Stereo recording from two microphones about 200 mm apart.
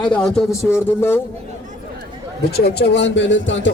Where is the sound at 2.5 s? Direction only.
55° left (ahead or behind).